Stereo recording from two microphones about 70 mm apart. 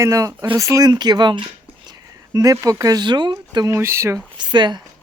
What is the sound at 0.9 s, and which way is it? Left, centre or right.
Speech, right.